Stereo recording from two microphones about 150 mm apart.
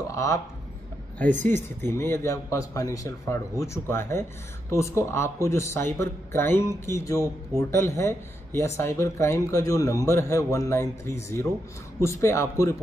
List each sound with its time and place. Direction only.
0.1 s speech: 20° left (ahead or behind)
1.5 s speech: 15° left (ahead or behind)